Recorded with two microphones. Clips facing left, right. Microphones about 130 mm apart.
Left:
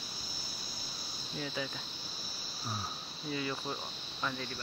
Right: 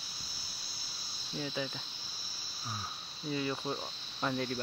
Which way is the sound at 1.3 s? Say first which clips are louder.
Right 1 dB; 25° right (ahead or behind).